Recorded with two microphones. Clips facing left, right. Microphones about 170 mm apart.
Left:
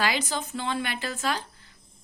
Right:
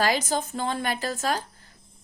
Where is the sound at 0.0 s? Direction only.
40° right (ahead or behind).